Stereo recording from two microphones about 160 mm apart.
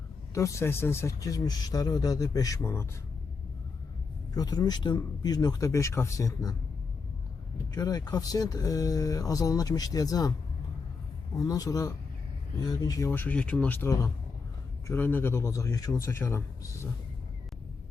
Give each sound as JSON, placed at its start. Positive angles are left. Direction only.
{"t": 0.3, "sound": "speech", "side_deg": 20}
{"t": 4.4, "sound": "speech", "side_deg": 25}
{"t": 7.7, "sound": "speech", "side_deg": 25}
{"t": 11.3, "sound": "speech", "side_deg": 25}